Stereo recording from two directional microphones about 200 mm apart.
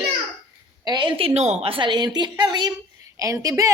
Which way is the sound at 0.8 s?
20° right (ahead or behind).